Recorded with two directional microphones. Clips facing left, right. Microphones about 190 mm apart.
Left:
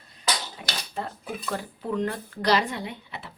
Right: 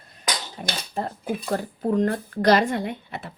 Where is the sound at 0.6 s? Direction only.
45° right (ahead or behind).